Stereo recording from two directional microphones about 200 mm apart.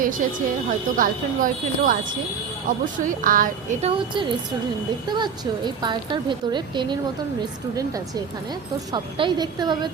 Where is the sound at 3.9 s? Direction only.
25° right (ahead or behind).